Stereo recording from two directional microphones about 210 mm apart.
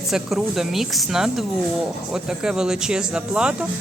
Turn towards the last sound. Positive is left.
turn(degrees=-5)  # may be behind; listen again after turning